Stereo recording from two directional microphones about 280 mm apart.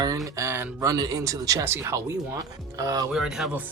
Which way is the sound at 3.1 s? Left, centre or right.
Centre.